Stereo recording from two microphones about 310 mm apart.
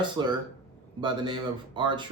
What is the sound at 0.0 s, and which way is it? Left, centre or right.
Speech, centre.